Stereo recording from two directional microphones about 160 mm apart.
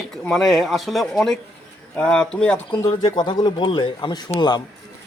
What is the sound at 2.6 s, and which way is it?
A man's voice, 25° left (ahead or behind).